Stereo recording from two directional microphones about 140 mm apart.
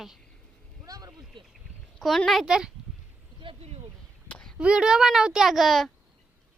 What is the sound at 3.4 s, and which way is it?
Speech, 45° right (ahead or behind).